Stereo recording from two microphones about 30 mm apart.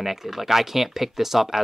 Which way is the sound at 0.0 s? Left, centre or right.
Centre.